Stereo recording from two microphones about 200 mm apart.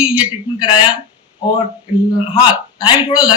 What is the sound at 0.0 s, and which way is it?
Speech, 5° right (ahead or behind).